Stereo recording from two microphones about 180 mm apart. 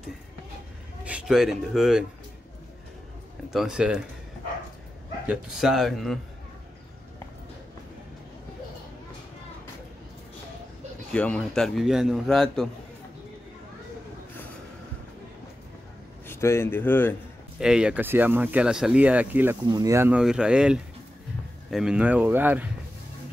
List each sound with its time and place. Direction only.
1.0 s speech: 5° right (ahead or behind)
3.4 s a man's voice: 5° right (ahead or behind)
5.3 s a man's voice: centre (ahead or behind)
11.1 s a man's voice: 5° left (ahead or behind)
16.3 s speech: 15° left (ahead or behind)
17.6 s speech: 5° right (ahead or behind)
19.6 s a man's voice: 20° right (ahead or behind)